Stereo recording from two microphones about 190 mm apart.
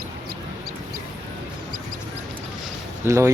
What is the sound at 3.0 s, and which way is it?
Speech, 15° right (ahead or behind).